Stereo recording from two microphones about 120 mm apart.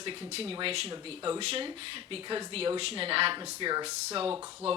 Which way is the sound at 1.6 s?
45° right (ahead or behind).